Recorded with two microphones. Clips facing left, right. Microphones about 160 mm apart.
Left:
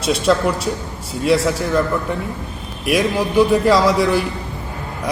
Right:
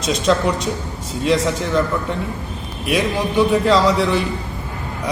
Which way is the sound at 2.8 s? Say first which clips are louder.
Left 2 dB; 10° left (ahead or behind).